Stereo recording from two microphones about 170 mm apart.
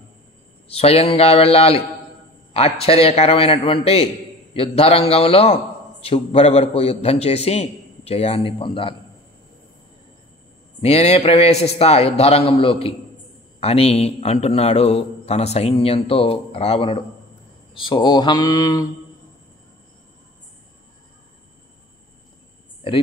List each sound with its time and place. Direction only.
0.7 s a man's voice: 35° left (ahead or behind)
10.8 s a man's voice: 35° left (ahead or behind)